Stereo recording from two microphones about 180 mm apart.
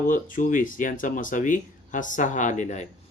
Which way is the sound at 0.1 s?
50° left (ahead or behind).